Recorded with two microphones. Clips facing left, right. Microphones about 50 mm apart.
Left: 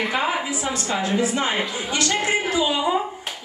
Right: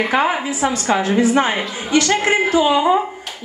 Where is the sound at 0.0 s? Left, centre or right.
Right.